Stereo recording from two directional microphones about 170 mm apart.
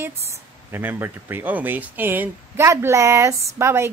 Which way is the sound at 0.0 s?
15° right (ahead or behind).